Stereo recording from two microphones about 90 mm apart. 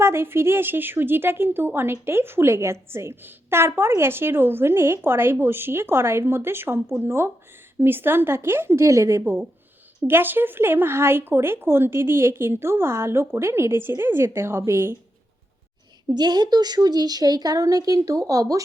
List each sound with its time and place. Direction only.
0.0 s speech: 25° right (ahead or behind)
16.0 s a woman's voice: 50° right (ahead or behind)